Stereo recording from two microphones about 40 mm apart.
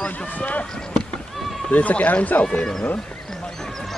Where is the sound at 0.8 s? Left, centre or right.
Left.